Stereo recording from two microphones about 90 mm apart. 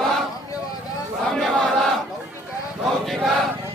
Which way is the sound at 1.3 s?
5° left (ahead or behind).